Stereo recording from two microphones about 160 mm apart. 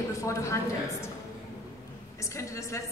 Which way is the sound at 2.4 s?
20° left (ahead or behind).